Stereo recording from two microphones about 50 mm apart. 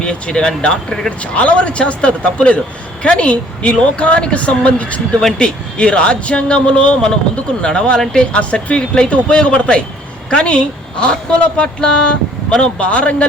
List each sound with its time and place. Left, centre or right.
0.0 s speech: centre
1.2 s speech: left